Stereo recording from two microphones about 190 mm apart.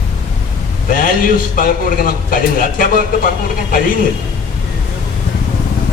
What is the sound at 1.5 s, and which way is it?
A man's voice, 50° left (ahead or behind).